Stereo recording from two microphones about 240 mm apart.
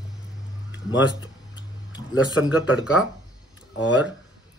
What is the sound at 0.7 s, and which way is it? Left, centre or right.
Speech, left.